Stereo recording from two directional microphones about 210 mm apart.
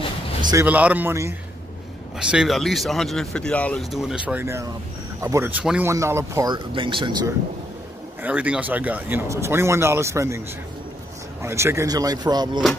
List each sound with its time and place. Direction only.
0.4 s music: 20° right (ahead or behind)
0.7 s speech: 5° right (ahead or behind)
8.2 s speech: 5° right (ahead or behind)
11.4 s speech: 15° right (ahead or behind)